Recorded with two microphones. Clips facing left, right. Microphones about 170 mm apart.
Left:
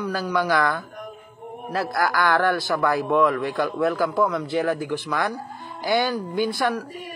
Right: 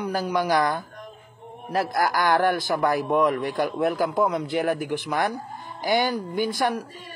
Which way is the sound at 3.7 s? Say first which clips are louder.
Left 2 dB; 15° right (ahead or behind).